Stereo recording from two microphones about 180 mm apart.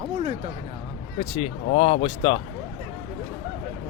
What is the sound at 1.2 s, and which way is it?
Speech, 35° left (ahead or behind).